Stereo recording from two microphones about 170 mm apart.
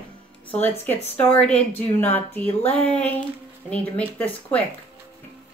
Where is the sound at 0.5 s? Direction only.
10° left (ahead or behind).